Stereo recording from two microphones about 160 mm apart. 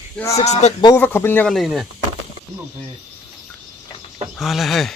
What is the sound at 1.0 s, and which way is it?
Speech, 15° left (ahead or behind).